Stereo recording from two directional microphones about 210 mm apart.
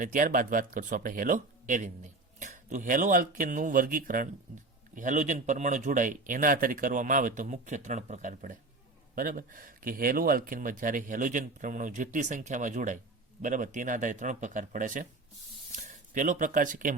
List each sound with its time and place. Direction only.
0.0 s speech: 40° right (ahead or behind)